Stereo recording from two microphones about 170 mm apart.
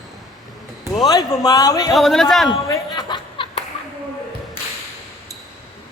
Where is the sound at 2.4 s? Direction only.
20° left (ahead or behind).